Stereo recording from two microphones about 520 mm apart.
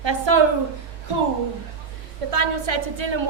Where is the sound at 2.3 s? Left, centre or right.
Right.